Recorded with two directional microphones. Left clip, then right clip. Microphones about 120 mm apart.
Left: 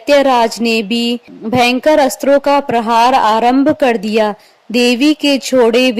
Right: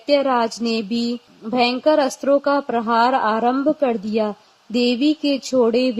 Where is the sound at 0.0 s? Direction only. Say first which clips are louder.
Left 8 dB; 60° left (ahead or behind).